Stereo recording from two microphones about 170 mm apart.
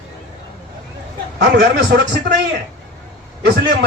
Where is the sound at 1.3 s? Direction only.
80° right.